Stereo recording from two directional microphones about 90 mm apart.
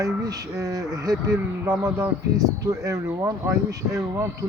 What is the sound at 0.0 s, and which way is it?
Speech, 40° right (ahead or behind).